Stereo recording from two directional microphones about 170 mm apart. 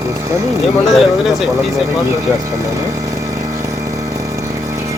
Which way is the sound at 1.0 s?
Centre (ahead or behind).